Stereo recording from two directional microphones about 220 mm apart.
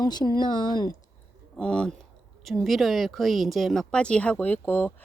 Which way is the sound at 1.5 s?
5° left (ahead or behind).